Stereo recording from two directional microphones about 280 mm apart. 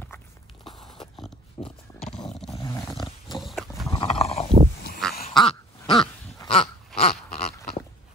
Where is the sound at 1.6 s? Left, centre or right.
Centre.